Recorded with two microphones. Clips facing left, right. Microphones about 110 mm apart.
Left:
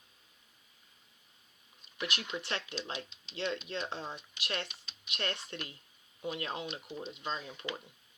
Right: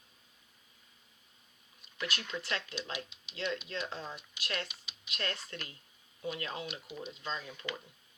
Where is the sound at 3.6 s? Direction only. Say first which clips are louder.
Left 1 dB; 25° left (ahead or behind).